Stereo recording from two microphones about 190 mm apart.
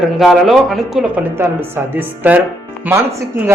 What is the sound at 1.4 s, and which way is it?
A man's voice, 15° right (ahead or behind).